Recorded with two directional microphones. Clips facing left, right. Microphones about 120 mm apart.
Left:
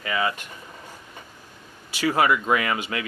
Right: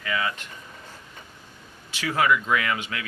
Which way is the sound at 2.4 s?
30° left (ahead or behind).